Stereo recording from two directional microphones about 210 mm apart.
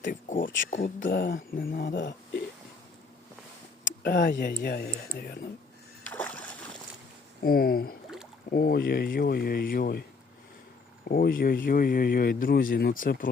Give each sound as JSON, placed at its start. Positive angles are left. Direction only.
{"t": 0.0, "sound": "speech", "side_deg": 40}
{"t": 1.0, "sound": "speech", "side_deg": 60}
{"t": 1.4, "sound": "speech", "side_deg": 45}
{"t": 2.0, "sound": "speech", "side_deg": 55}
{"t": 4.0, "sound": "speech", "side_deg": 45}
{"t": 6.0, "sound": "rowboat", "side_deg": 5}
{"t": 7.4, "sound": "speech", "side_deg": 45}
{"t": 11.0, "sound": "speech", "side_deg": 45}